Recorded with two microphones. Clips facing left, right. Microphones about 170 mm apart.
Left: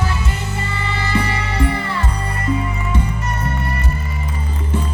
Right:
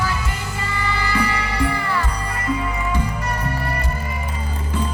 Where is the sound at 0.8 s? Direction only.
25° left (ahead or behind).